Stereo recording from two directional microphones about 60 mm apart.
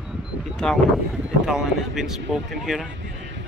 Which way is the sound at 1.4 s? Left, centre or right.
Centre.